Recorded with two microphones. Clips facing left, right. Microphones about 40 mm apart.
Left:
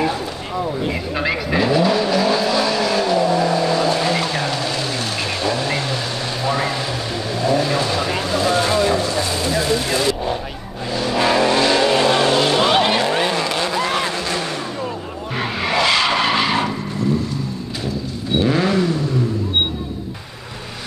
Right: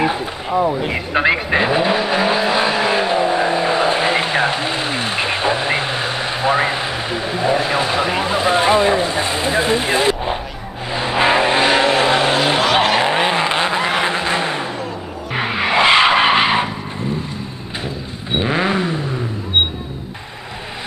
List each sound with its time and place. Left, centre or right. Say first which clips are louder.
0.8 s vehicle: right 5 dB; right
7.3 s speech: right 1 dB; right
10.9 s vehicle: right 2 dB; right
15.3 s skidding: right 4 dB; right
17.8 s vehicle: left 5 dB; right